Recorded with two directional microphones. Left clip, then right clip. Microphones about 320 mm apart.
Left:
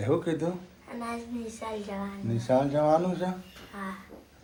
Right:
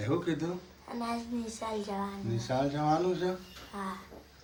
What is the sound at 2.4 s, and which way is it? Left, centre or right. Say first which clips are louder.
Speech: left 7 dB; centre.